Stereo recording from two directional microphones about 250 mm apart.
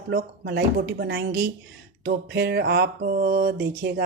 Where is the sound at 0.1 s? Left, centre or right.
Right.